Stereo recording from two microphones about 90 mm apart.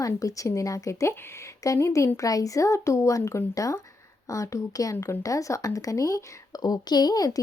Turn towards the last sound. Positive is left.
turn(degrees=45)  # may be behind; listen again after turning